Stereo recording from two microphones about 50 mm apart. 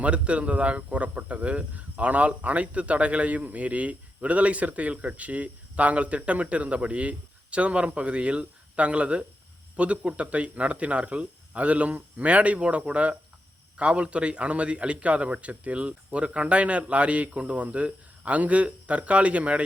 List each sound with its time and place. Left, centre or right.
0.0 s speech: right